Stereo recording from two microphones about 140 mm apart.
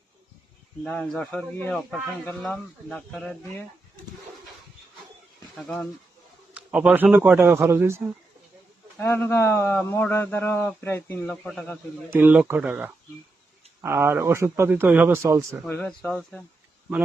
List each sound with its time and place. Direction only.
0.9 s a man's voice: 5° left (ahead or behind)
5.5 s speech: 5° left (ahead or behind)
6.5 s speech: 10° right (ahead or behind)
9.0 s a man's voice: 15° left (ahead or behind)
12.1 s a man's voice: 15° right (ahead or behind)
15.7 s speech: 5° left (ahead or behind)